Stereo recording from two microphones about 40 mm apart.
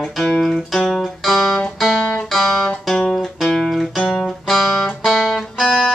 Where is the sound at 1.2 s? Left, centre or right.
Centre.